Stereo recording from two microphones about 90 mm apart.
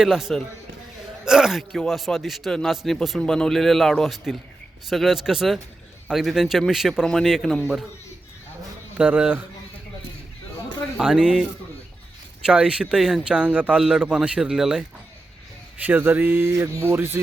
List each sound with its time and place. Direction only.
0.0 s a man's voice: 5° right (ahead or behind)
9.0 s a man's voice: 10° right (ahead or behind)
10.9 s a man's voice: 10° right (ahead or behind)
12.5 s a man's voice: 10° right (ahead or behind)
15.8 s speech: 20° right (ahead or behind)